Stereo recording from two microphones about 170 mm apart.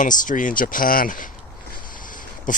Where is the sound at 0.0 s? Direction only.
50° left (ahead or behind).